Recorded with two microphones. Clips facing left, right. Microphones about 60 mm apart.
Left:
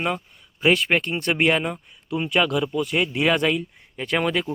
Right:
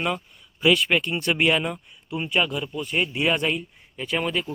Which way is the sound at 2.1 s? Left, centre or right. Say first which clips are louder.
Left 3 dB; left.